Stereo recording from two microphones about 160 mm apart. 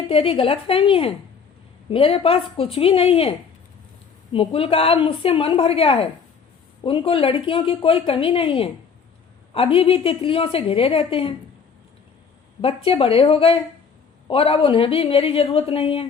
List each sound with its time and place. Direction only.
0.1 s a woman's voice: 35° left (ahead or behind)
12.6 s a woman's voice: 35° left (ahead or behind)